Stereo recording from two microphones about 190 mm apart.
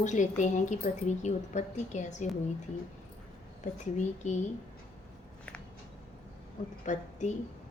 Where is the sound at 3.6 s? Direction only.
40° left (ahead or behind).